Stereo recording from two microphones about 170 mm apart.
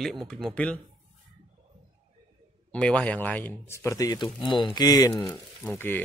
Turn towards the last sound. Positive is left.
turn(degrees=10)  # may be behind; listen again after turning